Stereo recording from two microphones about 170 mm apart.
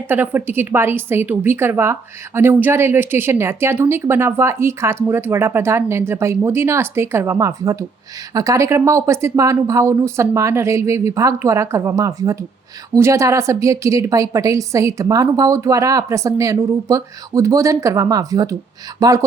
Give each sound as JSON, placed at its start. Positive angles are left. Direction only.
{"t": 0.1, "sound": "a woman's voice", "side_deg": -10}